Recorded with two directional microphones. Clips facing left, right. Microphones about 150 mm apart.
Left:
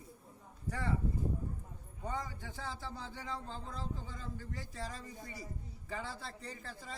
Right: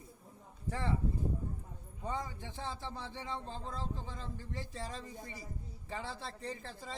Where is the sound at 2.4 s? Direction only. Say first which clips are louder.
Right 2 dB; 25° right (ahead or behind).